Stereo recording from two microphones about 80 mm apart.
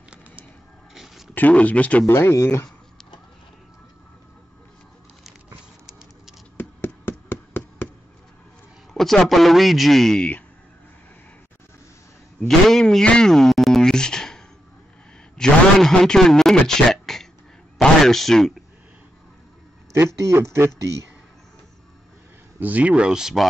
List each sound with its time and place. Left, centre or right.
0.9 s a sound: centre
1.3 s speech: centre
2.0 s speech: left
5.9 s patter: centre
6.5 s a sound: left
8.9 s a man's voice: centre
12.4 s a man's voice: centre
20.2 s speech: right
22.6 s speech: centre